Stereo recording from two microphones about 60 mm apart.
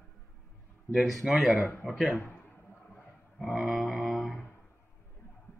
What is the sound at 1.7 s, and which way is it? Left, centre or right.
Speech, left.